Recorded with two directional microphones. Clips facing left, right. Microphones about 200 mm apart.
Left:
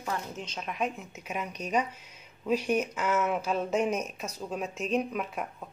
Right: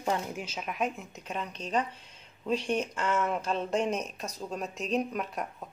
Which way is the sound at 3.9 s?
35° right (ahead or behind).